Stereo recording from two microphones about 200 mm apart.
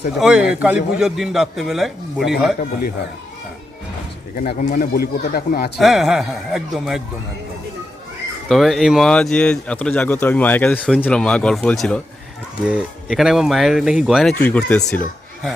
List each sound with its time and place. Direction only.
0.2 s speech: 5° right (ahead or behind)
4.4 s speech: 45° left (ahead or behind)
5.8 s speech: centre (ahead or behind)
8.4 s speech: centre (ahead or behind)